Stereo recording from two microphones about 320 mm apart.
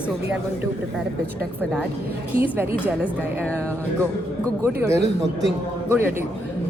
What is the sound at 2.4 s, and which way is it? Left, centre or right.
Speech, centre.